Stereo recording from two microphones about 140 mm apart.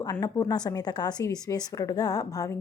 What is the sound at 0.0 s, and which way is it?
A woman's voice, 25° left (ahead or behind).